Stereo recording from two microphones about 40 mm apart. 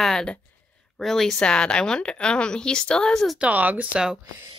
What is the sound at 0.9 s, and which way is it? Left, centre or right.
Speech, centre.